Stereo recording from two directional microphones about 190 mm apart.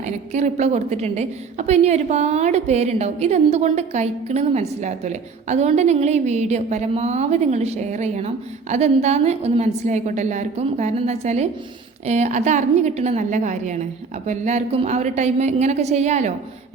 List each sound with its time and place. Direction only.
0.0 s a woman's voice: 40° right (ahead or behind)